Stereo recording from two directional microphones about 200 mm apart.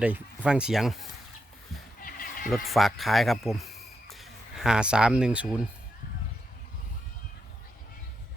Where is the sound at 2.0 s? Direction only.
45° left (ahead or behind).